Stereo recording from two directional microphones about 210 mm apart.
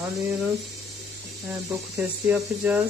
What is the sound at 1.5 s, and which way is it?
Speech, 10° right (ahead or behind).